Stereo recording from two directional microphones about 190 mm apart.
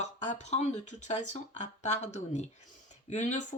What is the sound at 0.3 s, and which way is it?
Speech, 40° left (ahead or behind).